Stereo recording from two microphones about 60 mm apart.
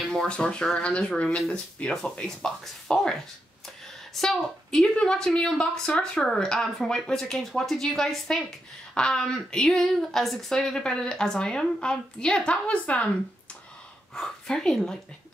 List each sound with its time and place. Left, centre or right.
0.1 s speech: centre
14.1 s speech: centre